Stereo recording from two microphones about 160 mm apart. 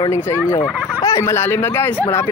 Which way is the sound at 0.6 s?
10° right (ahead or behind).